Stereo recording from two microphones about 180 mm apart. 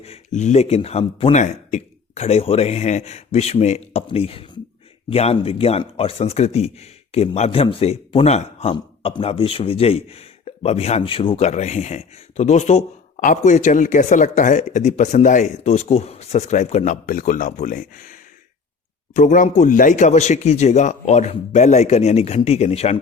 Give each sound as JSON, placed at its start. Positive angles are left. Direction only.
{"t": 0.0, "sound": "speech", "side_deg": 40}